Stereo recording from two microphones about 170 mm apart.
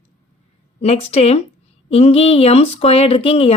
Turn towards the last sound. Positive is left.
turn(degrees=35)  # may be behind; listen again after turning